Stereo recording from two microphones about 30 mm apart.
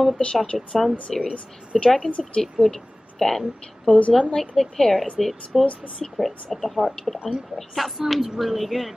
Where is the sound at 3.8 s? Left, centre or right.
Left.